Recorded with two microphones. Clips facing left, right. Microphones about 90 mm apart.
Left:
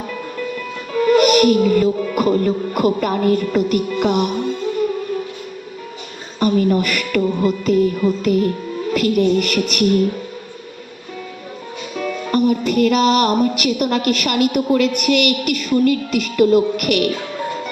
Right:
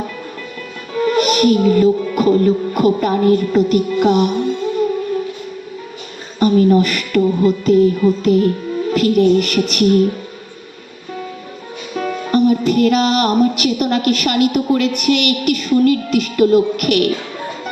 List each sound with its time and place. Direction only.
1.2 s music: 35° right (ahead or behind)
6.4 s music: 30° right (ahead or behind)
11.9 s music: 35° right (ahead or behind)